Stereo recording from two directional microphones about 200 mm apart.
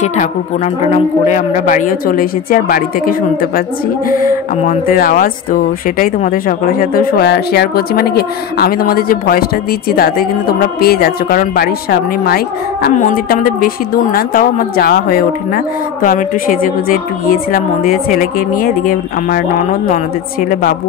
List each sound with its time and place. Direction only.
0.8 s speech: 35° left (ahead or behind)
4.6 s speech: 45° left (ahead or behind)